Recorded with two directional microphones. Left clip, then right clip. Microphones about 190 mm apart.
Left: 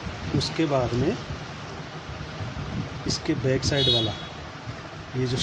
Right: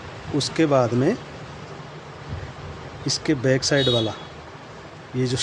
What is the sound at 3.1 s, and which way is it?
Speech, 30° right (ahead or behind).